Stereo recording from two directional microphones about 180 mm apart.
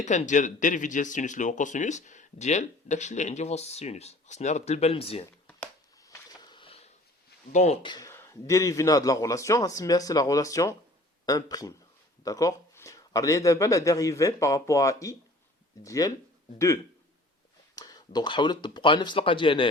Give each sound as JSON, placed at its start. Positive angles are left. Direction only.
{"t": 0.0, "sound": "speech", "side_deg": 40}
{"t": 6.0, "sound": "a sound", "side_deg": 20}
{"t": 7.5, "sound": "speech", "side_deg": 40}
{"t": 7.8, "sound": "speech", "side_deg": 25}
{"t": 17.7, "sound": "speech", "side_deg": 20}